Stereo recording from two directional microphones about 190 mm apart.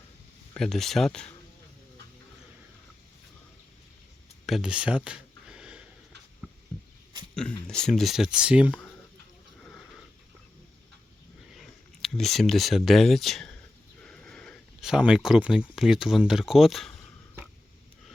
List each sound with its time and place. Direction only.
0.5 s speech: 5° left (ahead or behind)
4.4 s a sound: centre (ahead or behind)
7.3 s speech: 5° left (ahead or behind)
9.6 s sniff: 5° left (ahead or behind)
11.5 s speech: centre (ahead or behind)
14.0 s sniff: 5° left (ahead or behind)
15.7 s speech: centre (ahead or behind)